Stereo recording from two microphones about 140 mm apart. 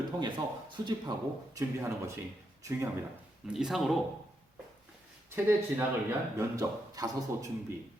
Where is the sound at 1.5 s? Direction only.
20° right (ahead or behind).